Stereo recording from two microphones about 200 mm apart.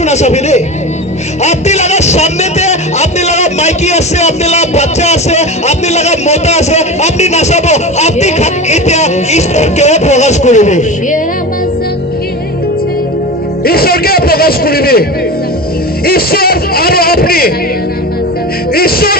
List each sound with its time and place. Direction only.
0.0 s a man's voice: 35° left (ahead or behind)
13.7 s speech: 50° left (ahead or behind)
16.0 s speech: 50° left (ahead or behind)
18.7 s music: 50° left (ahead or behind)